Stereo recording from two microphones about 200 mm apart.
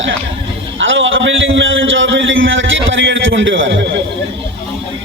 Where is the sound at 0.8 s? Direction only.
70° right (ahead or behind).